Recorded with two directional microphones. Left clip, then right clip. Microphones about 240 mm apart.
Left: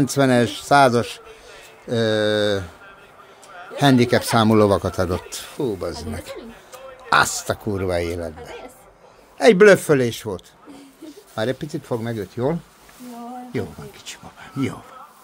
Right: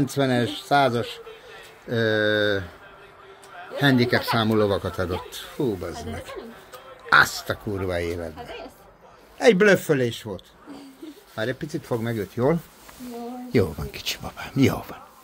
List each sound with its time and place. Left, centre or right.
0.0 s speech: left
1.9 s speech: centre
3.7 s a man's voice: left; by 12.5 s centre
13.5 s speech: right